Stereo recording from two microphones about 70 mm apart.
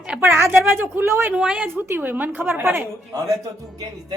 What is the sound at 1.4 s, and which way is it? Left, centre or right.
Speech, centre.